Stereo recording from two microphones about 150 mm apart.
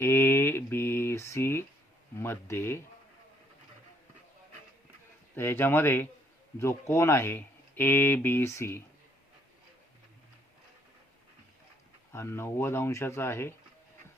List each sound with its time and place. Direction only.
0.0 s mantra: 15° left (ahead or behind)
2.1 s speech: 15° left (ahead or behind)
5.3 s speech: 15° left (ahead or behind)
12.1 s speech: 15° left (ahead or behind)